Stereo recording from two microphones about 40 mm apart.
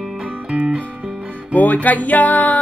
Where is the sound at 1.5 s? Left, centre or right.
Left.